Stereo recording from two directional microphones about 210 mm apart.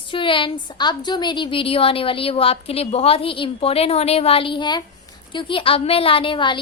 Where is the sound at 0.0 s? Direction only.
25° left (ahead or behind).